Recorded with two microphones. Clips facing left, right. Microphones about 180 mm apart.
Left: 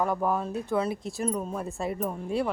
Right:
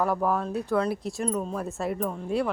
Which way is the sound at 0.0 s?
Centre (ahead or behind).